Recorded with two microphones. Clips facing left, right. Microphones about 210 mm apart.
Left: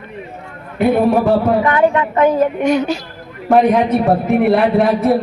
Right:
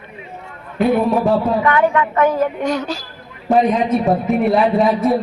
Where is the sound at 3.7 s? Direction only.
70° left (ahead or behind).